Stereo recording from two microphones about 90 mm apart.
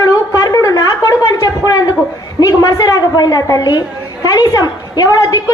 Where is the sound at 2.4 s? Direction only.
40° left (ahead or behind).